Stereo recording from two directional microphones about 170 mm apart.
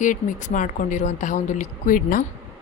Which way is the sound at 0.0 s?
50° left (ahead or behind).